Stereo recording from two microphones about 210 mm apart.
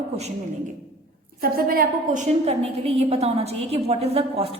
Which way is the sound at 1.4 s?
45° right (ahead or behind).